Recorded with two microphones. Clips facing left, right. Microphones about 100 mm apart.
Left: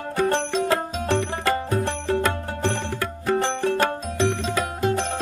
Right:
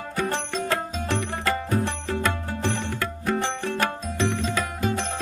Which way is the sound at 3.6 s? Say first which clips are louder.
Left 4 dB; 35° left (ahead or behind).